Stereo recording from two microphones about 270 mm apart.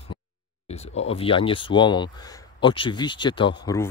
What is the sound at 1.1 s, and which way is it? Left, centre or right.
Speech, centre.